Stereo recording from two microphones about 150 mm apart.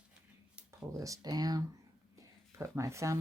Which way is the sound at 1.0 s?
25° right (ahead or behind).